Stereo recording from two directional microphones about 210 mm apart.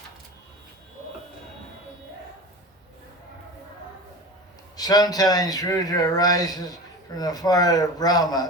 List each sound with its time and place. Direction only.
4.8 s a man's voice: 20° left (ahead or behind)